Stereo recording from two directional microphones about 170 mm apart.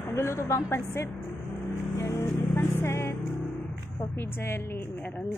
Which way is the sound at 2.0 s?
15° left (ahead or behind).